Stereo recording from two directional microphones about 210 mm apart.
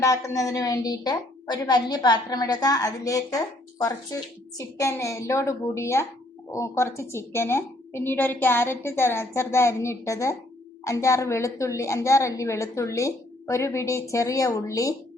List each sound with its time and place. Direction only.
0.0 s a woman's voice: 15° left (ahead or behind)